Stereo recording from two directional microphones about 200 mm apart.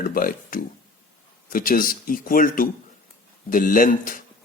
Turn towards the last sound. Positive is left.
turn(degrees=45)  # may be behind; listen again after turning